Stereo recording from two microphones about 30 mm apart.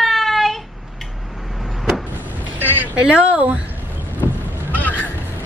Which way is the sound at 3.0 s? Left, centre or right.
Right.